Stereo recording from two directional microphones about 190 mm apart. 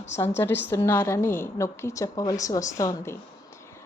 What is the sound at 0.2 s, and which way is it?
A woman's voice, 10° left (ahead or behind).